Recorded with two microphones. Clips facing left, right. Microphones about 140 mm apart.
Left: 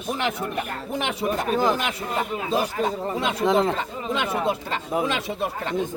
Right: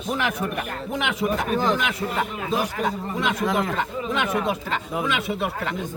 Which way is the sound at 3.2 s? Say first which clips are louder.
Left 3 dB; 30° left (ahead or behind).